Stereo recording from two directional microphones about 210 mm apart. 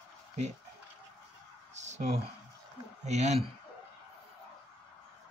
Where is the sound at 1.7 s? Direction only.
35° right (ahead or behind).